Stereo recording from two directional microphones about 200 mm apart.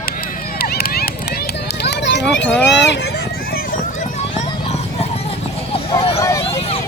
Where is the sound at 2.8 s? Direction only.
60° left (ahead or behind).